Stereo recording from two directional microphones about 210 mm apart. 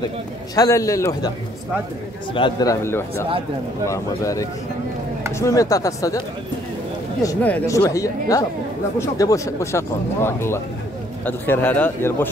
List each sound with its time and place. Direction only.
0.6 s speech: 15° left (ahead or behind)
2.3 s speech: 20° left (ahead or behind)
7.2 s speech: 10° left (ahead or behind)